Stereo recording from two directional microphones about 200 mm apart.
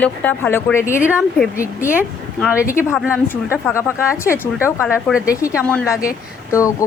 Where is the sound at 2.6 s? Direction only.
15° left (ahead or behind).